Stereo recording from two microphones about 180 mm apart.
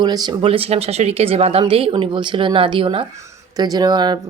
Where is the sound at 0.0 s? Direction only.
25° right (ahead or behind).